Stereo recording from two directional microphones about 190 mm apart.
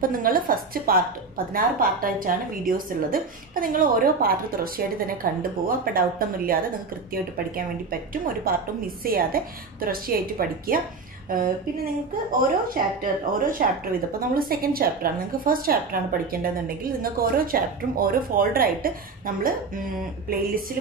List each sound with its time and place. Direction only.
0.0 s a woman's voice: 50° right (ahead or behind)